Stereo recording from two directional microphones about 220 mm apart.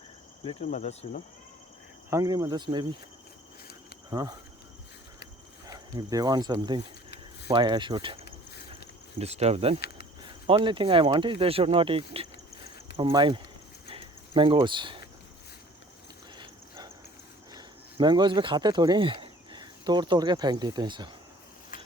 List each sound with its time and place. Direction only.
0.6 s speech: 35° left (ahead or behind)
2.0 s speech: 15° right (ahead or behind)
4.1 s speech: 15° right (ahead or behind)
5.6 s speech: 15° right (ahead or behind)
13.8 s a sound: 25° right (ahead or behind)
16.4 s dog: 20° right (ahead or behind)
17.5 s speech: 20° right (ahead or behind)